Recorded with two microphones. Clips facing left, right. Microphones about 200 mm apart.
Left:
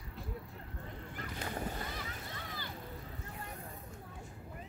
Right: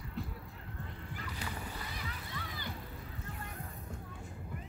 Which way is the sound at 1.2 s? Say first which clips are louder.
Left 4 dB; 45° left (ahead or behind).